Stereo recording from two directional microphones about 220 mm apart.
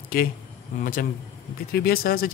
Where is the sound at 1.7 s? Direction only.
45° left (ahead or behind).